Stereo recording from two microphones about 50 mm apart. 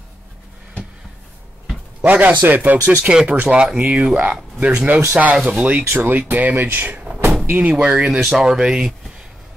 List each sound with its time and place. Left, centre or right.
2.0 s speech: right
3.0 s speech: centre
4.2 s speech: right
7.7 s speech: right
8.1 s speech: centre